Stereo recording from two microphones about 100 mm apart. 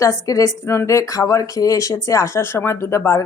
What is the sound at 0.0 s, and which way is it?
A woman's voice, 35° left (ahead or behind).